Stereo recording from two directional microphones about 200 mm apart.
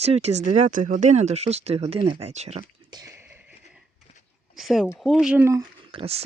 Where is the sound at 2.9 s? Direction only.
15° right (ahead or behind).